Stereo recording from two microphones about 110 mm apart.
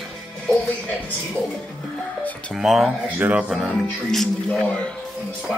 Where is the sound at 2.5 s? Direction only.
5° right (ahead or behind).